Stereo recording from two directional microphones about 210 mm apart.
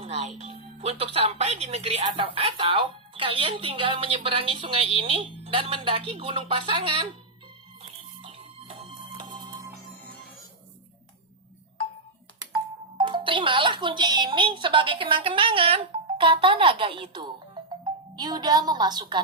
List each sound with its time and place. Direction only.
0.0 s speech: 30° right (ahead or behind)
7.8 s music: 25° right (ahead or behind)
13.0 s speech: 25° right (ahead or behind)